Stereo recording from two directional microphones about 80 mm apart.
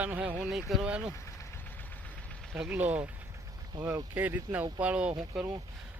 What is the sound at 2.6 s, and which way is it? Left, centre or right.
Speech, centre.